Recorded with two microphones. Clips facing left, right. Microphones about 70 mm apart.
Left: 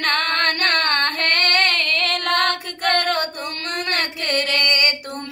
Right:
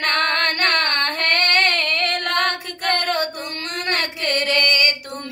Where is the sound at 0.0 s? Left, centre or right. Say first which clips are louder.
Even; left.